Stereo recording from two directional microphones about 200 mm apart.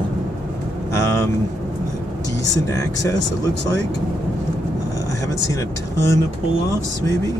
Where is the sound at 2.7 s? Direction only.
15° left (ahead or behind).